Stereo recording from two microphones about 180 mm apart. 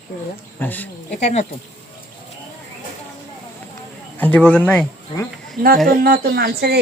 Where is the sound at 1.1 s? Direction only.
40° left (ahead or behind).